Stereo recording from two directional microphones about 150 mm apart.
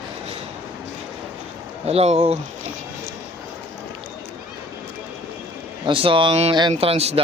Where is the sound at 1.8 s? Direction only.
45° right (ahead or behind).